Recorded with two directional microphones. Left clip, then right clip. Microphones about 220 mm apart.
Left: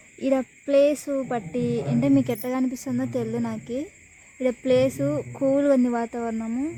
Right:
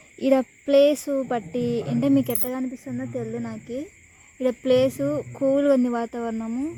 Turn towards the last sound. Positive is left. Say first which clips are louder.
# even
turn(degrees=-5)  # may be behind; listen again after turning